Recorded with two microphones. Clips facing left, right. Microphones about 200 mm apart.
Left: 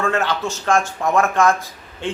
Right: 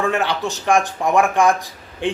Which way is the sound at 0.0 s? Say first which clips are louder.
Right 1 dB; 15° right (ahead or behind).